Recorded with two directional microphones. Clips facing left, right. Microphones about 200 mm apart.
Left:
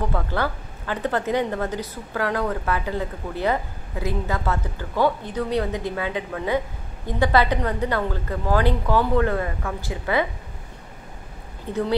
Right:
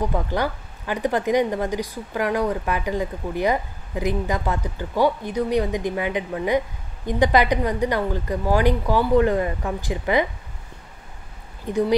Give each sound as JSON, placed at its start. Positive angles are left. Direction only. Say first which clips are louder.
{"t": 0.0, "sound": "a woman's voice", "louder": "right 2 dB", "side_deg": -15}
{"t": 11.7, "sound": "a woman's voice", "louder": "right 3 dB", "side_deg": -15}